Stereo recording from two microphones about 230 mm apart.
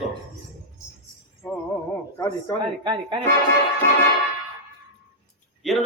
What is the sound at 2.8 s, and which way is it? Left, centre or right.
Speech, centre.